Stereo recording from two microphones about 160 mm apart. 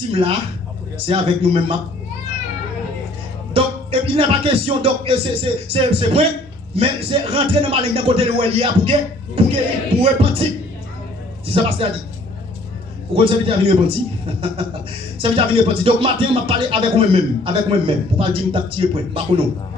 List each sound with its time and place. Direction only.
0.1 s speech: 35° right (ahead or behind)
3.5 s speech: 35° right (ahead or behind)
11.4 s speech: 35° right (ahead or behind)
13.1 s speech: 35° right (ahead or behind)
15.2 s speech: 35° right (ahead or behind)